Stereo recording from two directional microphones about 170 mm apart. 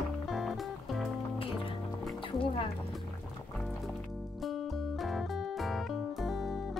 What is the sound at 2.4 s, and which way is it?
Speech, 30° left (ahead or behind).